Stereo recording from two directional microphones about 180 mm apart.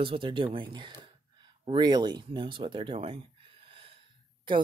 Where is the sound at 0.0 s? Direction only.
30° right (ahead or behind).